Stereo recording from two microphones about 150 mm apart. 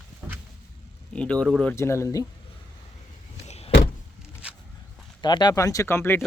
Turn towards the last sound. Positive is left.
turn(degrees=15)  # may be behind; listen again after turning